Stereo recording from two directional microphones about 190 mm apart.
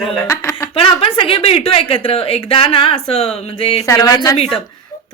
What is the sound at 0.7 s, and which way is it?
A woman's voice, 30° left (ahead or behind).